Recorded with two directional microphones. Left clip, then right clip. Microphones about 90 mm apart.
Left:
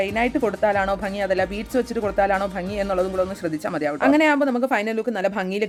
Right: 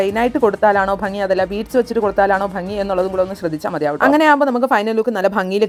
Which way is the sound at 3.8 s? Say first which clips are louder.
Right 5 dB; 45° right (ahead or behind).